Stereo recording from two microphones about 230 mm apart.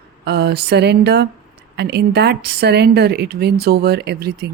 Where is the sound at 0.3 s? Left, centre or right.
Right.